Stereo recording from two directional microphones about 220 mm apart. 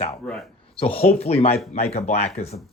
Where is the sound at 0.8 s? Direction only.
25° left (ahead or behind).